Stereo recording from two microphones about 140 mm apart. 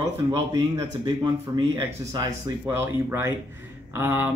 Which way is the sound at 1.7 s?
25° right (ahead or behind).